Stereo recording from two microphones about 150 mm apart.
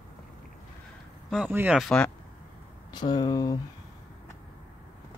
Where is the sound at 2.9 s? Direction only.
30° left (ahead or behind).